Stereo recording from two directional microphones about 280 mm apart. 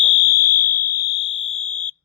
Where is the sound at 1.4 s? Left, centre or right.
Left.